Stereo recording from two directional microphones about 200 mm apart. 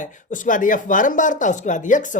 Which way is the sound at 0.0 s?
40° left (ahead or behind).